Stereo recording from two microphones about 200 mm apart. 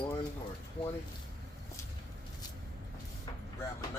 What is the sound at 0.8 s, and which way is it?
Speech, 30° left (ahead or behind).